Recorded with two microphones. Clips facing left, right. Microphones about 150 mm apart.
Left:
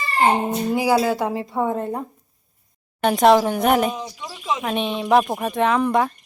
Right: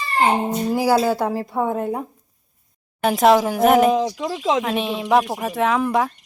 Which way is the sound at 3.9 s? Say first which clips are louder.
Right 11 dB; 90° right.